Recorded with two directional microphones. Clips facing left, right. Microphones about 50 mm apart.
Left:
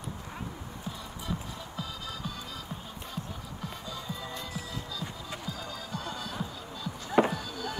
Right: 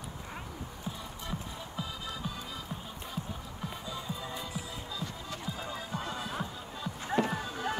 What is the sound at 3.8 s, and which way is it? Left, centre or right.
Music, centre.